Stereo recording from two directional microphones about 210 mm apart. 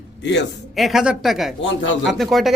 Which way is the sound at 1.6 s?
65° left (ahead or behind).